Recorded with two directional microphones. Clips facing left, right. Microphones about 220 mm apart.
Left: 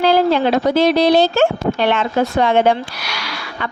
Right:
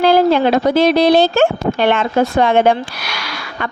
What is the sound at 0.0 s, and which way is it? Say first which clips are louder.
A woman's voice: right 2 dB; 50° right (ahead or behind).